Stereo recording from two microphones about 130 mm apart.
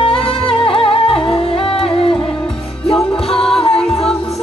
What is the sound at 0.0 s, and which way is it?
Music, 45° left (ahead or behind).